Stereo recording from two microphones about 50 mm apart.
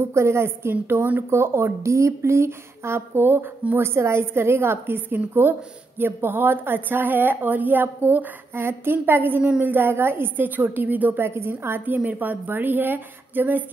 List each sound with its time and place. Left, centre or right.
0.1 s a woman's voice: right
11.8 s a woman's voice: right